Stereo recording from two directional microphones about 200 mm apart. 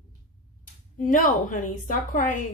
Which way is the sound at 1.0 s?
40° left (ahead or behind).